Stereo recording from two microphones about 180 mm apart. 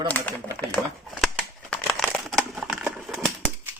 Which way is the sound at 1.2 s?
Centre (ahead or behind).